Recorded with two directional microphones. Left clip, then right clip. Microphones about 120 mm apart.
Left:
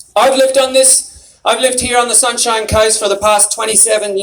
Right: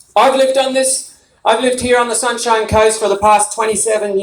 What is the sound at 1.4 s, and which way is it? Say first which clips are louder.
A man's voice: even; 40° left (ahead or behind).